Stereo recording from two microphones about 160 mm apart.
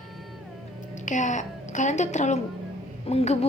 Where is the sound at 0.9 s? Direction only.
50° left (ahead or behind).